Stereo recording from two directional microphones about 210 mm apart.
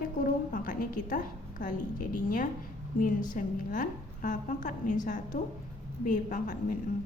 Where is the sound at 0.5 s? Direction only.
40° left (ahead or behind).